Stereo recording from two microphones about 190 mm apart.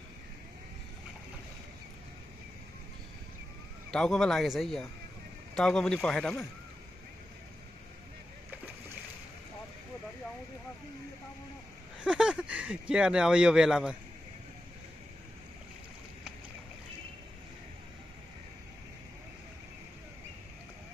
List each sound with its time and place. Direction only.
3.9 s speech: 5° left (ahead or behind)
12.0 s speech: 5° right (ahead or behind)